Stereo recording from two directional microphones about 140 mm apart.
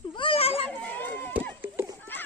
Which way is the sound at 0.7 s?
10° left (ahead or behind).